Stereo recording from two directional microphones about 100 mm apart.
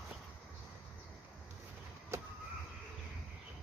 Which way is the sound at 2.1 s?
30° right (ahead or behind).